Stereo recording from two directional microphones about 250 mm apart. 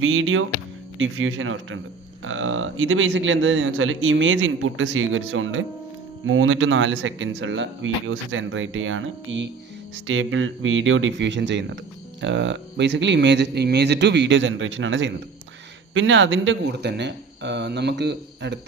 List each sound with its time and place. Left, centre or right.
0.0 s speech: right